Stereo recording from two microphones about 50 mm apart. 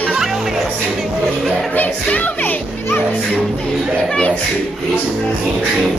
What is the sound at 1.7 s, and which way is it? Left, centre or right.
Speech, left.